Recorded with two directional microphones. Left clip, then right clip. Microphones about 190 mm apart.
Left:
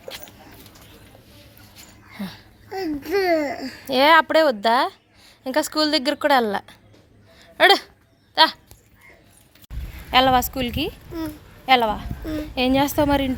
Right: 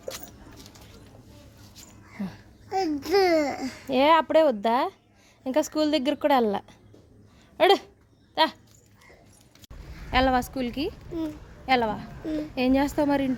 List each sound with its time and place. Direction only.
2.1 s speech: 15° right (ahead or behind)
2.6 s a child's voice: 40° right (ahead or behind)
3.8 s a woman's voice: 10° right (ahead or behind)
7.5 s a sound: 15° right (ahead or behind)
8.4 s dog: 20° right (ahead or behind)
10.1 s a woman's voice: 10° left (ahead or behind)